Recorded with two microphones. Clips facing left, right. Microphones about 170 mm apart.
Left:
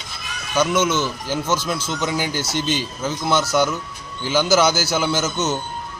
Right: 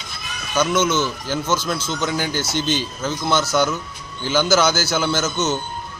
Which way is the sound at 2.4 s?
35° left (ahead or behind).